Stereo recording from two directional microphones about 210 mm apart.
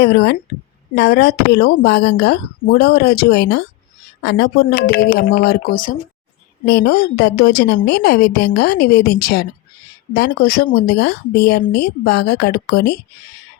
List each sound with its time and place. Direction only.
0.0 s speech: 55° left (ahead or behind)
6.7 s speech: 50° left (ahead or behind)